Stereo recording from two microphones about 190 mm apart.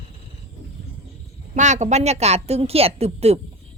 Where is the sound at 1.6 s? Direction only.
40° right (ahead or behind).